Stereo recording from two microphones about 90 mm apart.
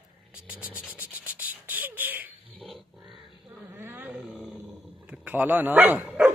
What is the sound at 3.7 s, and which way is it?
Wild animals, 25° right (ahead or behind).